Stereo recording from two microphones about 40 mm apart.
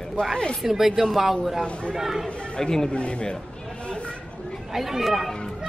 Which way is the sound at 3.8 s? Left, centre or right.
Left.